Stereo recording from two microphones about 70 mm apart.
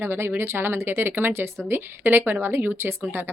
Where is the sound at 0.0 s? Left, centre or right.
Right.